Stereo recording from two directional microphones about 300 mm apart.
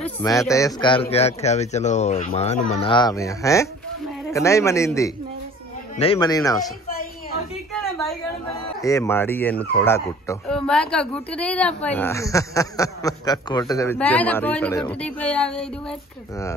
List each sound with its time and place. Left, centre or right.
0.0 s a man's voice: centre
7.7 s a sound: centre
8.8 s speech: centre